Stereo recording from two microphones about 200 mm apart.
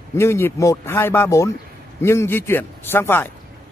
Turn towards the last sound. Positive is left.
turn(degrees=10)  # may be behind; listen again after turning